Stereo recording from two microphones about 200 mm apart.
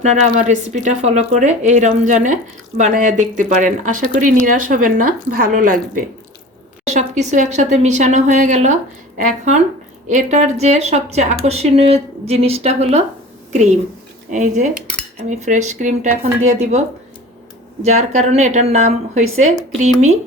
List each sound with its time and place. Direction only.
0.0 s a woman's voice: 35° right (ahead or behind)
14.3 s speech: 35° right (ahead or behind)
17.8 s speech: 35° right (ahead or behind)